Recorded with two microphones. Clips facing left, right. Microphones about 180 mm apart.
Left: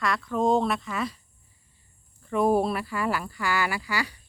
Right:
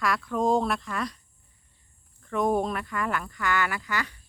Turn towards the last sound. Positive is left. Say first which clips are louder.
# left 2 dB
turn(degrees=10)  # may be behind; listen again after turning